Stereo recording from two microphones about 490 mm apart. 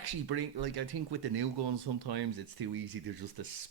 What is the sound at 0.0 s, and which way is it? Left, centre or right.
Speech, right.